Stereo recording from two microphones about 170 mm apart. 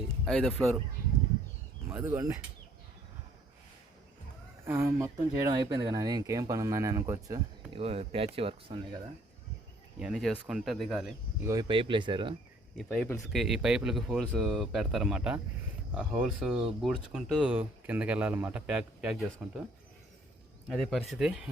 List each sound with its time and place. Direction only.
0.3 s speech: 5° left (ahead or behind)
2.0 s speech: 15° right (ahead or behind)
4.6 s speech: 15° right (ahead or behind)
7.7 s speech: 35° right (ahead or behind)
10.0 s speech: centre (ahead or behind)
11.4 s speech: 25° right (ahead or behind)
12.7 s speech: 10° left (ahead or behind)
20.7 s speech: centre (ahead or behind)